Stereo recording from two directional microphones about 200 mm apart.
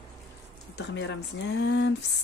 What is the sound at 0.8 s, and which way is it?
Speech, 65° left (ahead or behind).